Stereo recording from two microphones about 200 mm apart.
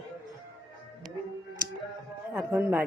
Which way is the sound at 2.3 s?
10° right (ahead or behind).